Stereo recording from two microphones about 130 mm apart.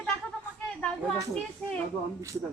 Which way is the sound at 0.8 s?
5° left (ahead or behind).